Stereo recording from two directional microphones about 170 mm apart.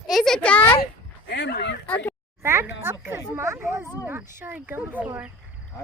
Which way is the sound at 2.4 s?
15° right (ahead or behind).